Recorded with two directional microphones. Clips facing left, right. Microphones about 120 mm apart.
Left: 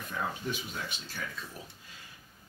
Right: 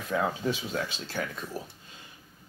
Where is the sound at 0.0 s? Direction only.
90° right.